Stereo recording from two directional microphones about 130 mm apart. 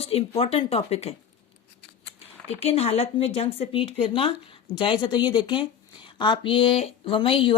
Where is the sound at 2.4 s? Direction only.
50° left (ahead or behind).